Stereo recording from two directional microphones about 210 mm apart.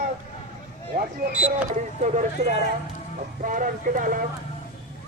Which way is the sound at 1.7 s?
35° right (ahead or behind).